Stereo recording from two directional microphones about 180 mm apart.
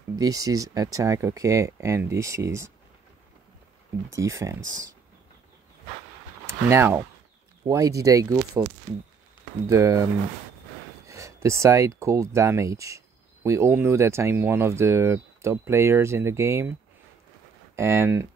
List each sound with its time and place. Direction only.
0.1 s speech: 20° right (ahead or behind)
4.1 s speech: 15° right (ahead or behind)
6.4 s speech: 15° right (ahead or behind)
9.7 s speech: 15° right (ahead or behind)
11.1 s speech: 15° right (ahead or behind)
17.7 s speech: 15° right (ahead or behind)